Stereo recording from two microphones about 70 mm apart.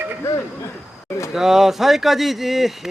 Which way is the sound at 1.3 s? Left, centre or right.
Centre.